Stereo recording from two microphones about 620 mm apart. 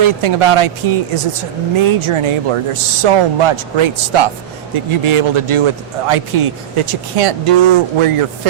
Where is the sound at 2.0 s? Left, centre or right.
Right.